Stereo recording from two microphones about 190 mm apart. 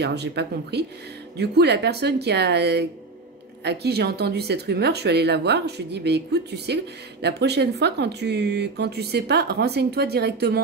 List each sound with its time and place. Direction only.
0.0 s speech: 60° right (ahead or behind)